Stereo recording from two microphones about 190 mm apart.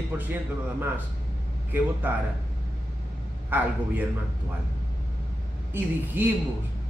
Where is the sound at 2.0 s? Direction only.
10° right (ahead or behind).